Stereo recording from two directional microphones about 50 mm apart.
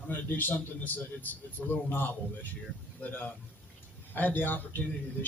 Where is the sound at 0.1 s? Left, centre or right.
Left.